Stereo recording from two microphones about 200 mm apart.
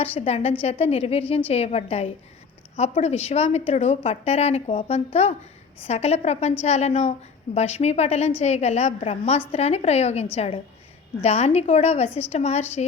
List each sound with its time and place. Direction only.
0.0 s a woman's voice: 30° left (ahead or behind)